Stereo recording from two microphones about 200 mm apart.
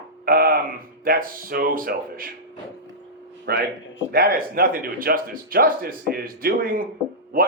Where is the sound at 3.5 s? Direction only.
50° right (ahead or behind).